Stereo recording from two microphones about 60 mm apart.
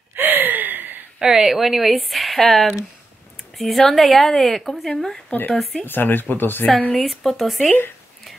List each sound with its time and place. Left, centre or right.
0.1 s gasp: right
1.2 s a woman's voice: centre
5.9 s speech: left
6.8 s speech: left
7.1 s a woman's voice: centre